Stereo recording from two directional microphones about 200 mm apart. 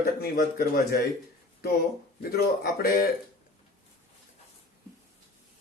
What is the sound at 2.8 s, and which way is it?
Speech, 45° left (ahead or behind).